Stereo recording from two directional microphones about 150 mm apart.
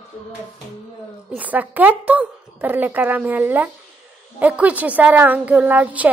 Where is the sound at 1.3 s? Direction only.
10° right (ahead or behind).